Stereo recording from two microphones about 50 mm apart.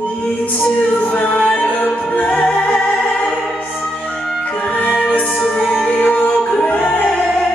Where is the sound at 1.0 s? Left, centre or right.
Left.